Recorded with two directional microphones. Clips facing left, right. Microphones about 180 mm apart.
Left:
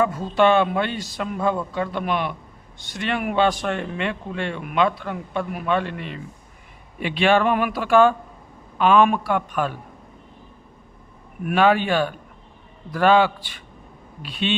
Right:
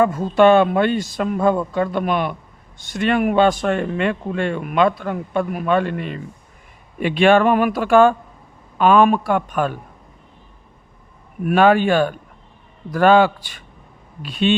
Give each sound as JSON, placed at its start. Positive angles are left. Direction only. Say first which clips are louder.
{"t": 0.0, "sound": "speech", "louder": "right 5 dB", "side_deg": -50}
{"t": 11.4, "sound": "speech", "louder": "right 4 dB", "side_deg": -45}